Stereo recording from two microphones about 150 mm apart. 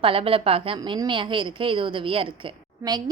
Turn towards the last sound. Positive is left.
turn(degrees=-30)  # may be behind; listen again after turning